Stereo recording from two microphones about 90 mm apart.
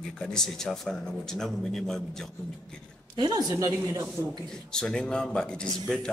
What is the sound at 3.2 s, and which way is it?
Speech, 50° right (ahead or behind).